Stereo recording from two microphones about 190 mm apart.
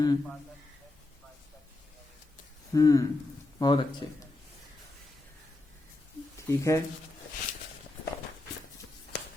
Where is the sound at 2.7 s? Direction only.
20° left (ahead or behind).